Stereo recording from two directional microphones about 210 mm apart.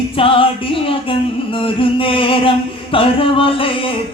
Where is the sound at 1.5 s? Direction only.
25° left (ahead or behind).